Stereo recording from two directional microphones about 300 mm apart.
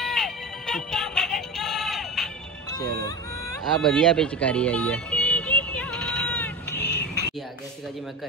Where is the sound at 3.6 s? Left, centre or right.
Centre.